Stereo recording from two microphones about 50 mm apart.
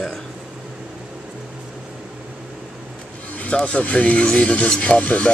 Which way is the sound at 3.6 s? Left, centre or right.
Left.